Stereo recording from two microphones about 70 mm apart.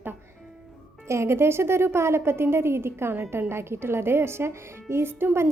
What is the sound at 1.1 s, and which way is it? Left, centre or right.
A woman's voice, right.